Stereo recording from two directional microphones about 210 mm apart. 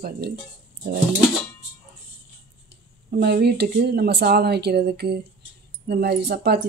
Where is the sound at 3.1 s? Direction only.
50° right (ahead or behind).